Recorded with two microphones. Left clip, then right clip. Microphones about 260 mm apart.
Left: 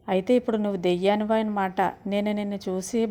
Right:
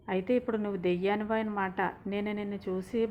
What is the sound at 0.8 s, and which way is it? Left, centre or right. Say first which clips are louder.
Speech: left 6 dB; left.